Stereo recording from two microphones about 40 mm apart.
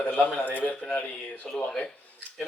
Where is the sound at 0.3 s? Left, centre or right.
Left.